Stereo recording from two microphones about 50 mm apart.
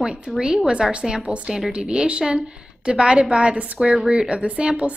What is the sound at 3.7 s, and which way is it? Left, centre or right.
A woman's voice, centre.